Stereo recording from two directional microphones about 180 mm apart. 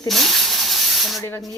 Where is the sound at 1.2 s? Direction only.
15° left (ahead or behind).